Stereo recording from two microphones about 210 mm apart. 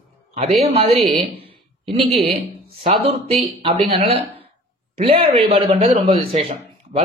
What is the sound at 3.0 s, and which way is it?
A man's voice, 30° right (ahead or behind).